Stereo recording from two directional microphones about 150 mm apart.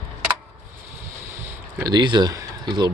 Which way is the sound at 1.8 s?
30° right (ahead or behind).